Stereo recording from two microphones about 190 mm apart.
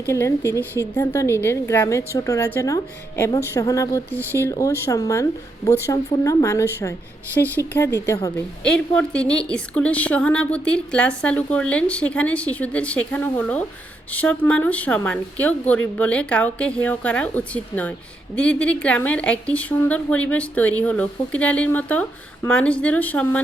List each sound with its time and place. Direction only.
0.1 s a woman's voice: 15° left (ahead or behind)
8.6 s a woman's voice: 5° left (ahead or behind)